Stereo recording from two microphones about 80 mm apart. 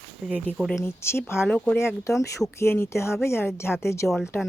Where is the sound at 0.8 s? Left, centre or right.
Left.